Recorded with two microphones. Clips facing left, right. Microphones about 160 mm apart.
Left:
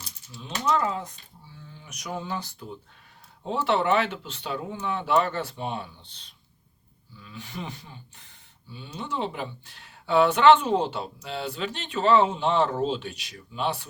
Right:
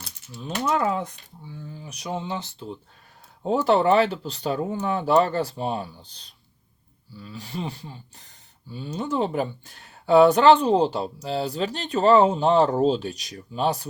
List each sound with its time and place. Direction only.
0.0 s ratchet: 55° right (ahead or behind)
1.5 s speech: 35° right (ahead or behind)
3.4 s speech: 40° right (ahead or behind)